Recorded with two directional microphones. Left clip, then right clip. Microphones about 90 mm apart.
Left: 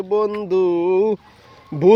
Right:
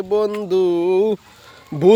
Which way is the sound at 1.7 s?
40° right (ahead or behind).